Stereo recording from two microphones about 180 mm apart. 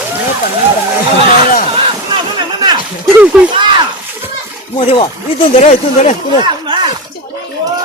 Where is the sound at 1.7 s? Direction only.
30° right (ahead or behind).